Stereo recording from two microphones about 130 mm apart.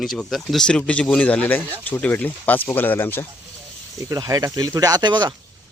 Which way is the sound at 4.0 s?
30° right (ahead or behind).